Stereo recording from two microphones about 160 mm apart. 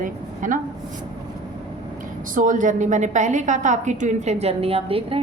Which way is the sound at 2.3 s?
55° right (ahead or behind).